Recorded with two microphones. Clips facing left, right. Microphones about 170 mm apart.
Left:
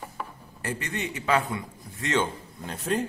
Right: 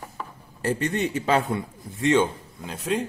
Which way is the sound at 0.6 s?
30° right (ahead or behind).